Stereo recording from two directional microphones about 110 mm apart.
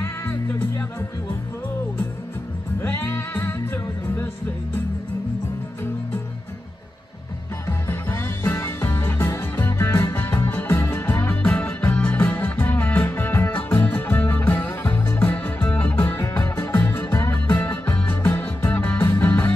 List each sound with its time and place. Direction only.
0.0 s music: 20° left (ahead or behind)
2.8 s music: 20° left (ahead or behind)
7.6 s music: 20° left (ahead or behind)